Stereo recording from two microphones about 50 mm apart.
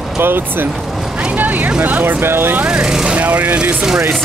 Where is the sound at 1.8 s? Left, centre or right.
Right.